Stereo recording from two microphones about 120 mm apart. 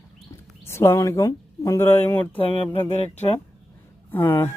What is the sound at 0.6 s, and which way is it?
Speech, 20° left (ahead or behind).